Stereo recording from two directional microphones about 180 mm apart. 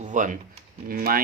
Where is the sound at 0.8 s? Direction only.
55° right (ahead or behind).